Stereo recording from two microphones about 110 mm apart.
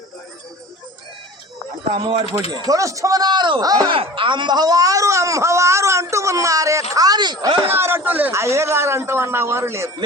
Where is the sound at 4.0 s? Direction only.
50° right (ahead or behind).